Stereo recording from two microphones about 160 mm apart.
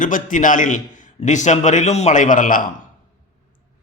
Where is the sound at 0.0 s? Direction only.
55° left (ahead or behind).